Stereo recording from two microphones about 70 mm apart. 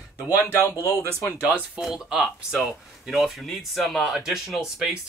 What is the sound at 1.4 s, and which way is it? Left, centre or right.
Speech, centre.